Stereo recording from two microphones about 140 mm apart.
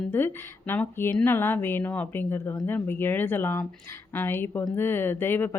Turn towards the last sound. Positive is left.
turn(degrees=15)  # may be behind; listen again after turning